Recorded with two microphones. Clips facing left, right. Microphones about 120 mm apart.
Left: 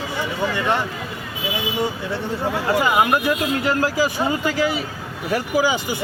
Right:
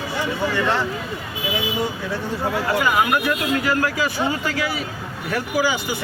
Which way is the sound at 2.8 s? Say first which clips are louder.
Left 2 dB; 25° left (ahead or behind).